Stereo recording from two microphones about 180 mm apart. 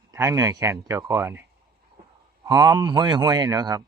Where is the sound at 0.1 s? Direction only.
15° right (ahead or behind).